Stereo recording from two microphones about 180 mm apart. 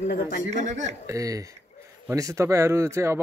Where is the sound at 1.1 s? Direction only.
20° right (ahead or behind).